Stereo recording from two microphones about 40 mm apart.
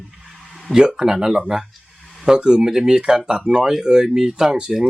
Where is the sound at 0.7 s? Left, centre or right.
Centre.